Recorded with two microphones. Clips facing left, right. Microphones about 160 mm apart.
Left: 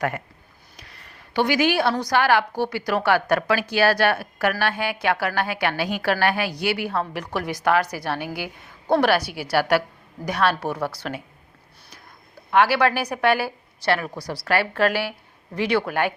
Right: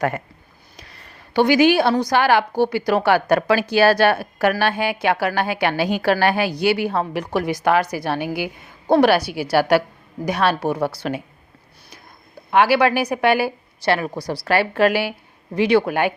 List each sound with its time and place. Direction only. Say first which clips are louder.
0.8 s a woman's voice: right 3 dB; 35° right (ahead or behind)
12.5 s a woman's voice: right 3 dB; 15° right (ahead or behind)